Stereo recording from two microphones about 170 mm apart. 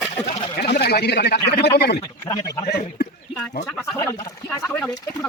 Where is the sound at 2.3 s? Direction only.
20° left (ahead or behind).